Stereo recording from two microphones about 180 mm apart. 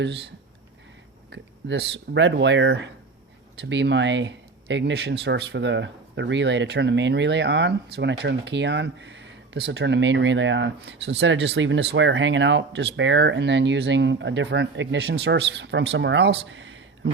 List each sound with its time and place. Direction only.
0.0 s speech: 70° right (ahead or behind)
1.3 s a sound: 75° right (ahead or behind)
2.1 s speech: 80° right